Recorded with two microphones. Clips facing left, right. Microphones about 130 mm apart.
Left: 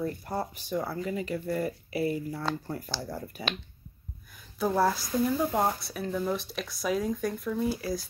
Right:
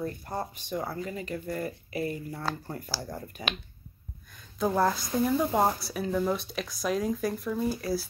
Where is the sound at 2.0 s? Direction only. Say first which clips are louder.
Left 3 dB; 5° left (ahead or behind).